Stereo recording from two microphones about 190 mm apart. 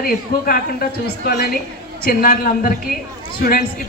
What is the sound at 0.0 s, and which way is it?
A man's voice, 50° left (ahead or behind).